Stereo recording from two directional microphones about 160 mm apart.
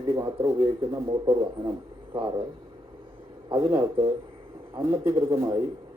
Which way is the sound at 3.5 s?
35° right (ahead or behind).